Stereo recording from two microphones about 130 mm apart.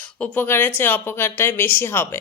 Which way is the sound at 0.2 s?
15° left (ahead or behind).